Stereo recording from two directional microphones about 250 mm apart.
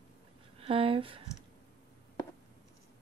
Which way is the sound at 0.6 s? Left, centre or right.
Right.